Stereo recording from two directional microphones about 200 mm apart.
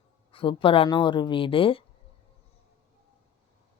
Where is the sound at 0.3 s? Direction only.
25° left (ahead or behind).